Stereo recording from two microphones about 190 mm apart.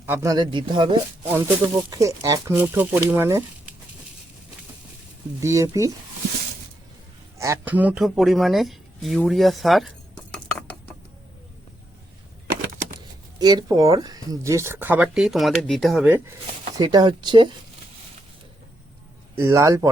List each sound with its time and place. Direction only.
0.0 s speech: 10° right (ahead or behind)
5.4 s speech: 15° right (ahead or behind)
7.3 s speech: 15° right (ahead or behind); by 9.9 s centre (ahead or behind)
10.3 s a sound: 5° left (ahead or behind)
12.6 s a sound: 55° right (ahead or behind)
13.4 s speech: 20° right (ahead or behind)
16.7 s speech: 20° right (ahead or behind)
19.4 s speech: 15° right (ahead or behind)